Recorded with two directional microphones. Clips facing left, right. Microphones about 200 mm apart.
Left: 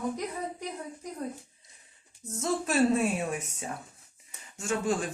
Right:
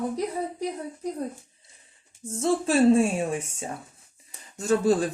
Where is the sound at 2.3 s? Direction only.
30° right (ahead or behind).